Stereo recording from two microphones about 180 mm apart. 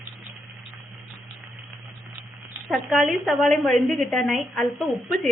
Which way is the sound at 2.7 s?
Centre (ahead or behind).